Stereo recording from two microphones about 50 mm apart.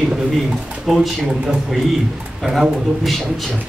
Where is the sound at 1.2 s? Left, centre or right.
Centre.